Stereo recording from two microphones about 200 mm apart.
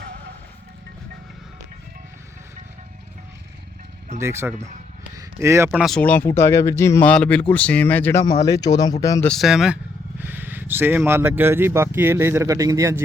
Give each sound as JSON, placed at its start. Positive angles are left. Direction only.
{"t": 4.2, "sound": "speech", "side_deg": -15}
{"t": 5.8, "sound": "speech", "side_deg": 5}
{"t": 9.2, "sound": "speech", "side_deg": 0}